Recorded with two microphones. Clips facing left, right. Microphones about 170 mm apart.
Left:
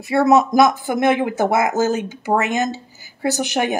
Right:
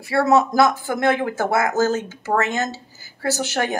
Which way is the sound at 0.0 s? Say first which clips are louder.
Left 3 dB; 20° left (ahead or behind).